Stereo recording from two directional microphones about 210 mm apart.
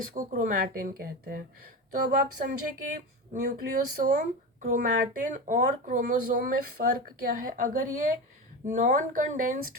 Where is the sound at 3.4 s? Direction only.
45° right (ahead or behind).